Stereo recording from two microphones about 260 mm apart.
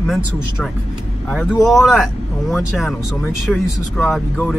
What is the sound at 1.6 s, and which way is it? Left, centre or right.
Speech, centre.